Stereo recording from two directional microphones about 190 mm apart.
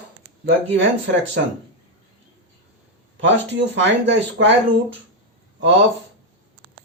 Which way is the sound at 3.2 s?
70° right (ahead or behind).